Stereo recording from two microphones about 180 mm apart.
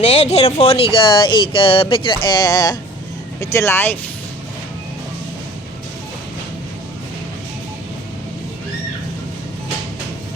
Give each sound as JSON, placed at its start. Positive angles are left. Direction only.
{"t": 0.0, "sound": "speech", "side_deg": 35}